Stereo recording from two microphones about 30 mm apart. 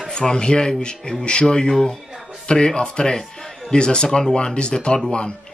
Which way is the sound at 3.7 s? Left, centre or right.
Left.